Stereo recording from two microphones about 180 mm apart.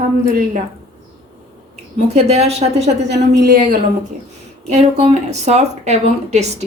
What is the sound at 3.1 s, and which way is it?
Speech, 70° right (ahead or behind).